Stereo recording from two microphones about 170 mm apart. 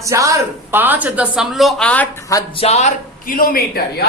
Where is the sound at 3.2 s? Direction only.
55° left (ahead or behind).